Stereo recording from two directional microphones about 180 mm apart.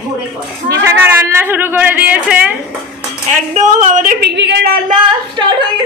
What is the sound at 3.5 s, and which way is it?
Speech, 45° right (ahead or behind).